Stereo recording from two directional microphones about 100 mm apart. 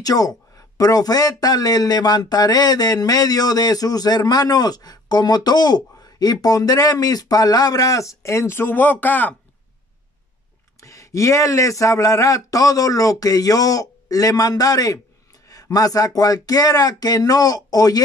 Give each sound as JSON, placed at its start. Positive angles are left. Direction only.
{"t": 0.0, "sound": "speech", "side_deg": 40}
{"t": 10.8, "sound": "speech", "side_deg": 35}